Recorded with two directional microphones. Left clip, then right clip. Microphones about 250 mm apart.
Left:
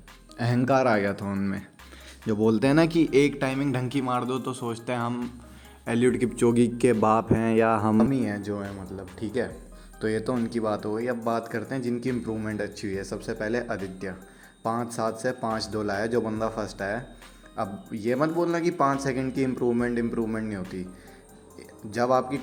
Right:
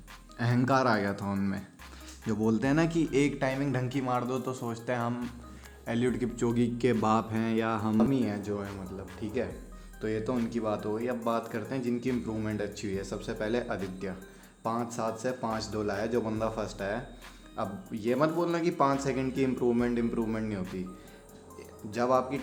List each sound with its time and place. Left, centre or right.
0.3 s speech: centre
21.9 s speech: centre